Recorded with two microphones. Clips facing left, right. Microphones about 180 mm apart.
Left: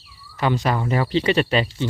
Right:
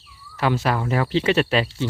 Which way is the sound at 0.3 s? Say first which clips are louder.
Even; 5° right (ahead or behind).